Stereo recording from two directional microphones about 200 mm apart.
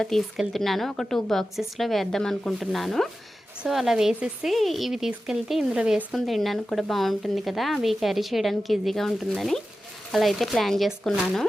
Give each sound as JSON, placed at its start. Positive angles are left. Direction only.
{"t": 0.0, "sound": "a woman's voice", "side_deg": 0}